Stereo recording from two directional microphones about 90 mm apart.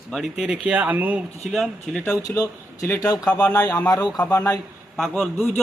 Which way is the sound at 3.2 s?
15° left (ahead or behind).